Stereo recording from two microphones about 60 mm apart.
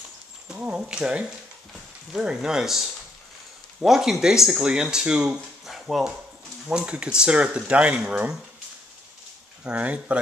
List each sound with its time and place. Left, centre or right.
0.5 s speech: centre
6.7 s speech: centre
9.7 s speech: right